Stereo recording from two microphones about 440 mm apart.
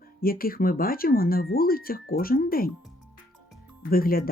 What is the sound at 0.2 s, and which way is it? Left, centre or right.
Speech, centre.